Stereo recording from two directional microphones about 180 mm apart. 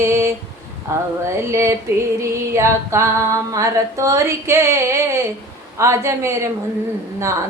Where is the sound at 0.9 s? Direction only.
15° right (ahead or behind).